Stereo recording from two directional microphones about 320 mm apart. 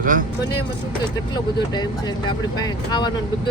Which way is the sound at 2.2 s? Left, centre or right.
Centre.